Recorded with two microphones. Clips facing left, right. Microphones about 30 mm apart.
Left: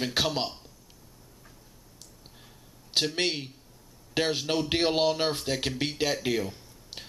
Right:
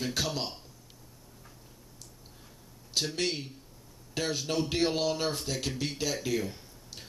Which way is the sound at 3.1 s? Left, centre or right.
Left.